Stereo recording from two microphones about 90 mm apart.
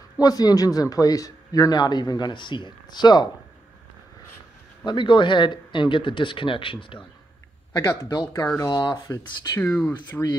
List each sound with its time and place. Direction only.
0.2 s speech: 45° left (ahead or behind)
4.8 s speech: 60° left (ahead or behind)
7.7 s speech: 30° left (ahead or behind)
8.1 s speech: 45° left (ahead or behind)
10.1 s speech: 5° left (ahead or behind)